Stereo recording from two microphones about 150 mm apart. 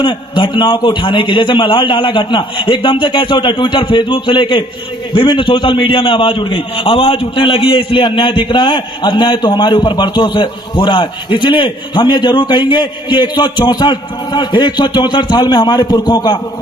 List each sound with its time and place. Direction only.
0.0 s a man's voice: 30° left (ahead or behind)